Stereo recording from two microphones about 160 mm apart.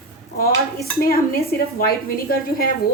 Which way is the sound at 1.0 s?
65° left (ahead or behind).